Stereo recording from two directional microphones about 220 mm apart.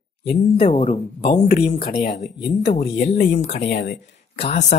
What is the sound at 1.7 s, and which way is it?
Speech, 35° left (ahead or behind).